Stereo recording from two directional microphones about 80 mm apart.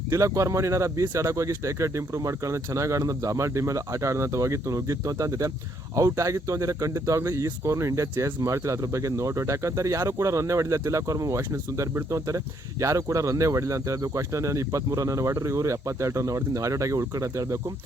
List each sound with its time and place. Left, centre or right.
0.1 s speech: right